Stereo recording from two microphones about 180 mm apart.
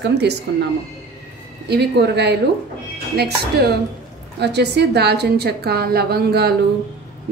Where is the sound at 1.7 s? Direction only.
70° right (ahead or behind).